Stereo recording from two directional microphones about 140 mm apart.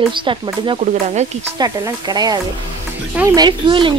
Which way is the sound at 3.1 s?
15° right (ahead or behind).